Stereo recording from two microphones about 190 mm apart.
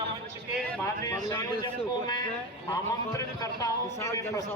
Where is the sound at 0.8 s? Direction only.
15° left (ahead or behind).